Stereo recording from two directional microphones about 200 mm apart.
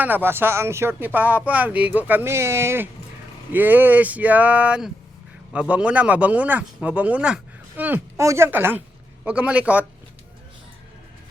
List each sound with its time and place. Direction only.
0.0 s speech: 10° right (ahead or behind)